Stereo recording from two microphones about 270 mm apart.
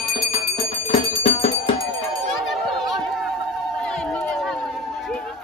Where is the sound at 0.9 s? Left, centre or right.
Left.